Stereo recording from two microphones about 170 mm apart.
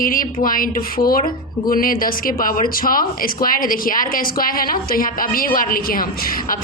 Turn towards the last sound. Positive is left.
turn(degrees=55)  # may be behind; listen again after turning